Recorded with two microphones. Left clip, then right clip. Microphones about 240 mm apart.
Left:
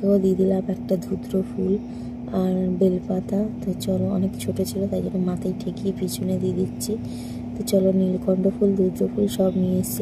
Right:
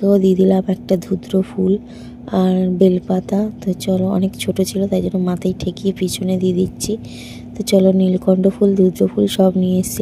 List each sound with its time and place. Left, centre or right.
0.0 s a woman's voice: right